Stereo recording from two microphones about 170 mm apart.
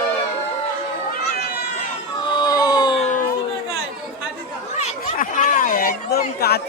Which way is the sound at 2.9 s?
40° left (ahead or behind).